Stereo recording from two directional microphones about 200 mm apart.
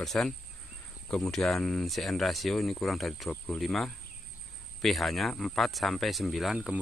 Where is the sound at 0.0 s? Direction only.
Centre (ahead or behind).